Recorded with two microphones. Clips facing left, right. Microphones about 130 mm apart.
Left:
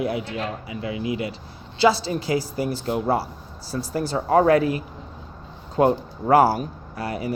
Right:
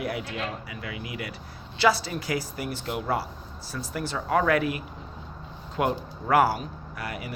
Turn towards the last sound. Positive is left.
turn(degrees=30)  # may be behind; listen again after turning